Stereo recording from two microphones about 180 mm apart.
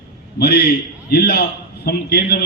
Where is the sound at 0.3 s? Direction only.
60° left (ahead or behind).